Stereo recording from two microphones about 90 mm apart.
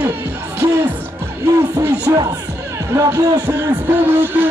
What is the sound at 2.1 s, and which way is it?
Speech, 35° right (ahead or behind).